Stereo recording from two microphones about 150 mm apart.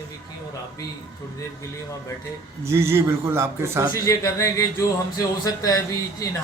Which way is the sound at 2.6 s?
15° right (ahead or behind).